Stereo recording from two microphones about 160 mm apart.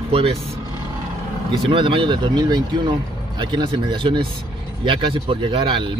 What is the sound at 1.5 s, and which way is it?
Speech, 35° right (ahead or behind).